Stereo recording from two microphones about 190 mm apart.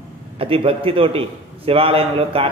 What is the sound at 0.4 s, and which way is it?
A man's voice, 30° right (ahead or behind).